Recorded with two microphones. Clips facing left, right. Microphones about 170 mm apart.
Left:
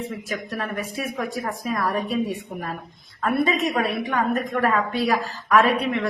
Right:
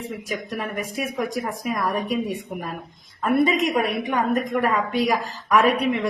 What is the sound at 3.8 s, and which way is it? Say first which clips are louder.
A woman's voice: right 1 dB; 15° right (ahead or behind).